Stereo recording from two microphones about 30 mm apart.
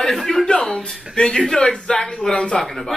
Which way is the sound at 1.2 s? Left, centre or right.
Left.